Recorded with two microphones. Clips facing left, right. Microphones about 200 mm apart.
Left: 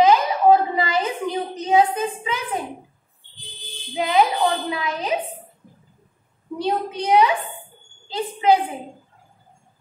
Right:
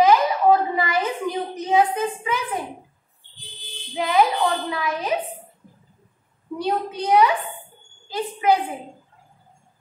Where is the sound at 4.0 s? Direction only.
20° left (ahead or behind).